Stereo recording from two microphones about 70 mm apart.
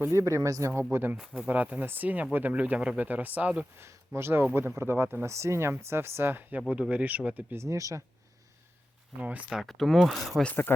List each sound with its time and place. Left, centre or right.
0.1 s speech: right
0.7 s speech: right
1.5 s speech: right
3.8 s speech: right
6.6 s speech: centre
7.5 s speech: right
9.2 s speech: right
9.5 s speech: centre
10.4 s speech: left